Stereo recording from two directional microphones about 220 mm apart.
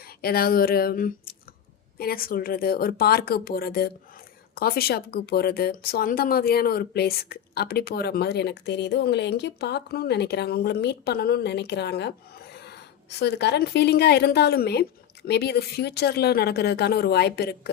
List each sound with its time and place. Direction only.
0.2 s speech: 45° left (ahead or behind)